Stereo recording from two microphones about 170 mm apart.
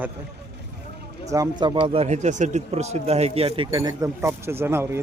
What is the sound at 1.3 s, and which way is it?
A man's voice, 25° right (ahead or behind).